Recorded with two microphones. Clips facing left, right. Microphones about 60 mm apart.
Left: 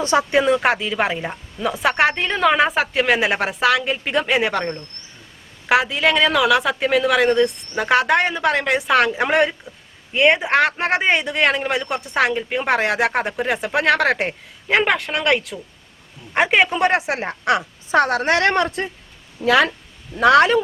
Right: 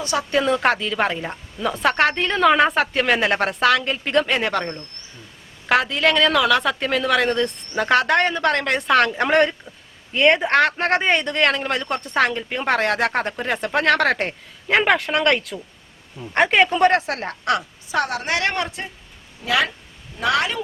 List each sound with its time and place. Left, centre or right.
0.0 s speech: left
0.3 s a woman's voice: centre
17.9 s a woman's voice: left
20.1 s a woman's voice: left